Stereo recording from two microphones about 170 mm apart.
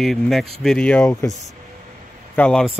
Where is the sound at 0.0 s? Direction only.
Centre (ahead or behind).